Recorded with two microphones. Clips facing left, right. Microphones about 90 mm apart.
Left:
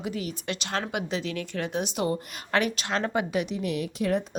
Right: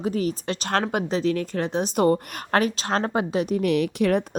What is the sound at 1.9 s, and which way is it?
A woman's voice, 50° right (ahead or behind).